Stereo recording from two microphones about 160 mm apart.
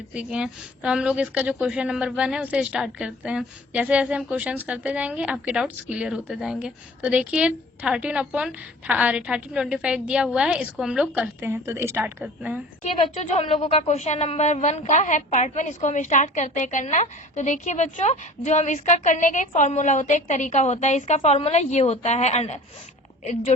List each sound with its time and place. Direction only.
0.1 s a woman's voice: 5° right (ahead or behind)
12.8 s speech: 45° left (ahead or behind)